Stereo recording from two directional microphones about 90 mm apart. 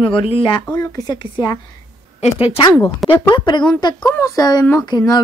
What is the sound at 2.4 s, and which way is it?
Speech, 90° left.